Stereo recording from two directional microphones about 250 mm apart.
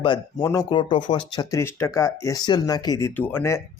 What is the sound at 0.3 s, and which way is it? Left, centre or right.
Speech, centre.